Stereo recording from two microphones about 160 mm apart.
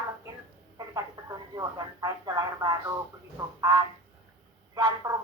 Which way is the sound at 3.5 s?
20° right (ahead or behind).